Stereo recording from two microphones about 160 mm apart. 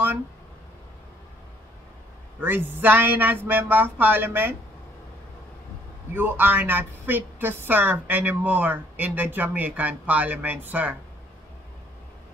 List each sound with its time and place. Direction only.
2.4 s a woman's voice: 10° right (ahead or behind)
6.1 s a woman's voice: 10° right (ahead or behind)